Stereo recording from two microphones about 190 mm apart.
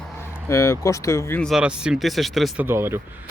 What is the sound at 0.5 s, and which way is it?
Speech, 15° left (ahead or behind).